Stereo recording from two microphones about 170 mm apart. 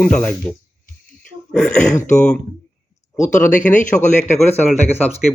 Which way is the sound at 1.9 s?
45° left (ahead or behind).